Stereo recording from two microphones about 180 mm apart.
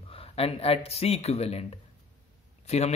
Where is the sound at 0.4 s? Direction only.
35° left (ahead or behind).